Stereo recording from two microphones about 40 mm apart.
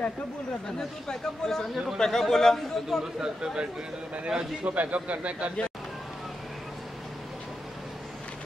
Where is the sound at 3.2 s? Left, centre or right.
Centre.